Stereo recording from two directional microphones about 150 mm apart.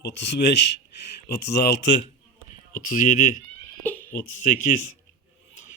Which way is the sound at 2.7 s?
60° left (ahead or behind).